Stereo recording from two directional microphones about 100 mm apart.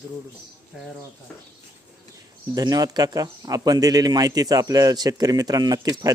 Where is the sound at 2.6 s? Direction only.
40° right (ahead or behind).